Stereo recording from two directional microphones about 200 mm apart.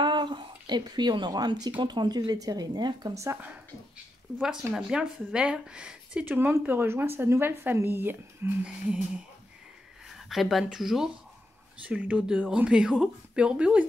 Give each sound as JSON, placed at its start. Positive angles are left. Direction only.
{"t": 0.0, "sound": "a sound", "side_deg": -25}
{"t": 1.8, "sound": "speech", "side_deg": -20}
{"t": 4.4, "sound": "speech", "side_deg": -5}